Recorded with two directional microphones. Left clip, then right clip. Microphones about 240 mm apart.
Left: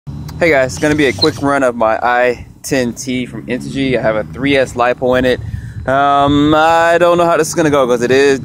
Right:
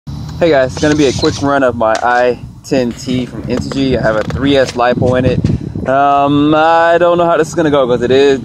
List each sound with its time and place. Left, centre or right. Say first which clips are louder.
0.4 s speech: right 1 dB; centre
3.1 s speech: right 2 dB; right
3.8 s speech: right 1 dB; centre